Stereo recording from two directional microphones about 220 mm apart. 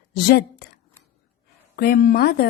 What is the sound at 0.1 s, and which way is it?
Speech, 45° left (ahead or behind).